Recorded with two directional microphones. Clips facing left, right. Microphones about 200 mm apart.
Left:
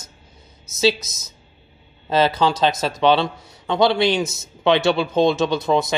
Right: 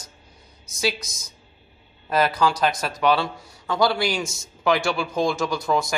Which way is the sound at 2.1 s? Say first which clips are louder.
Left 3 dB; 25° left (ahead or behind).